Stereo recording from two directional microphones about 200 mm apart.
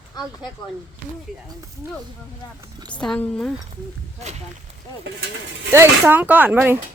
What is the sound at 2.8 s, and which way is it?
Speech, 5° left (ahead or behind).